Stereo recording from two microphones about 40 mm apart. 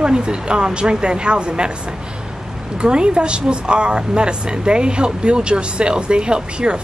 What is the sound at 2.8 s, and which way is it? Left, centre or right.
Speech, right.